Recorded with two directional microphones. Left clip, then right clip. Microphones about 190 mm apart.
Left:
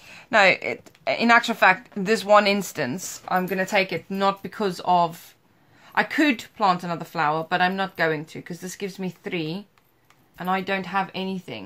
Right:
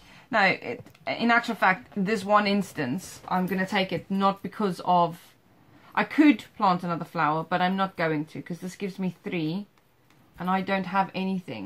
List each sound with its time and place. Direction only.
0.1 s speech: 45° left (ahead or behind)